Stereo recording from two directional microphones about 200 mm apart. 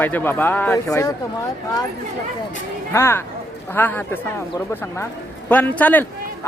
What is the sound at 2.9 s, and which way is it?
A man's voice, 15° left (ahead or behind).